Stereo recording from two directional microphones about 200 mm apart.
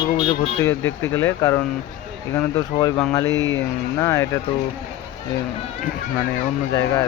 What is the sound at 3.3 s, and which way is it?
Speech, 70° left (ahead or behind).